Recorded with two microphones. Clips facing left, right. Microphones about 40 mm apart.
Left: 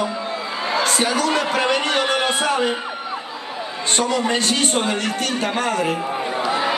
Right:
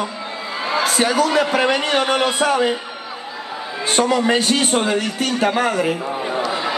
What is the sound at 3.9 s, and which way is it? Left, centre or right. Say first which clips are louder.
A man's voice: right 4 dB; centre.